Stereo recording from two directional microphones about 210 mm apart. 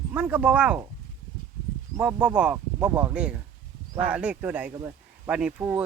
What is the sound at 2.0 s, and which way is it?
Speech, 5° right (ahead or behind).